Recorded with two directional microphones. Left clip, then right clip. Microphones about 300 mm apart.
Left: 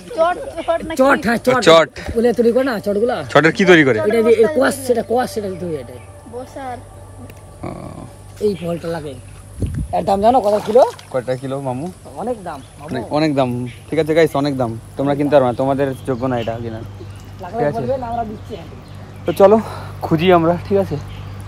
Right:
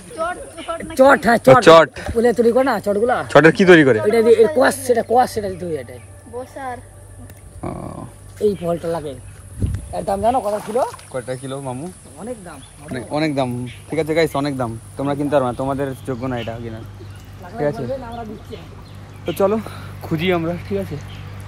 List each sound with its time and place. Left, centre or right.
0.2 s speech: left
0.9 s speech: centre
7.6 s speech: centre
9.9 s speech: left
11.1 s speech: centre
12.2 s speech: centre
12.9 s speech: centre
19.2 s speech: centre